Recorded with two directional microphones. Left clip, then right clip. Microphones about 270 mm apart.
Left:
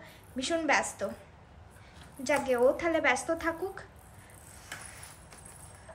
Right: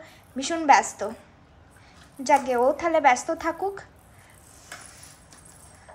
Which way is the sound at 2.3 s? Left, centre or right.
Right.